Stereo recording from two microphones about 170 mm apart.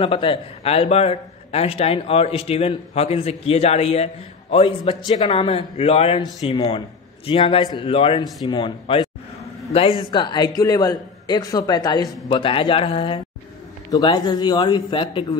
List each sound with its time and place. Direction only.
0.0 s a man's voice: 30° left (ahead or behind)